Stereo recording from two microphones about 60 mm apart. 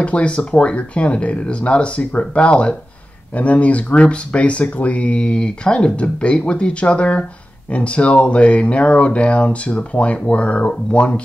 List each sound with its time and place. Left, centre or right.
0.0 s speech: left